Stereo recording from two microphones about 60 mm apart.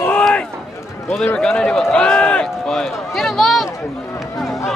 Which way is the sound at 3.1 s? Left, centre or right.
Centre.